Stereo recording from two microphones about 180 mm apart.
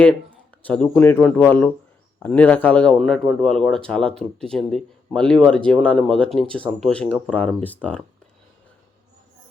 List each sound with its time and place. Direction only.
0.6 s speech: 5° left (ahead or behind)